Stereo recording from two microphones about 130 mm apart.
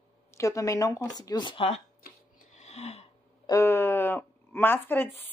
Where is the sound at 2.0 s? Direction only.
90° left.